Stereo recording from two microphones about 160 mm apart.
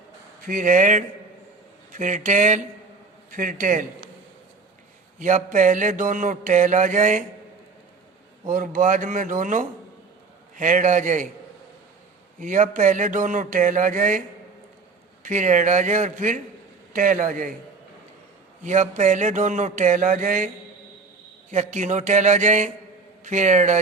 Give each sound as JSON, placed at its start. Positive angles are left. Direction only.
{"t": 0.4, "sound": "mantra", "side_deg": -60}
{"t": 3.3, "sound": "a man's voice", "side_deg": -55}
{"t": 5.2, "sound": "mantra", "side_deg": -50}
{"t": 8.4, "sound": "speech", "side_deg": -55}
{"t": 10.6, "sound": "mantra", "side_deg": -50}
{"t": 12.4, "sound": "mantra", "side_deg": -55}
{"t": 15.2, "sound": "mantra", "side_deg": -50}
{"t": 16.9, "sound": "speech", "side_deg": -55}
{"t": 18.6, "sound": "mantra", "side_deg": -50}
{"t": 21.5, "sound": "mantra", "side_deg": -45}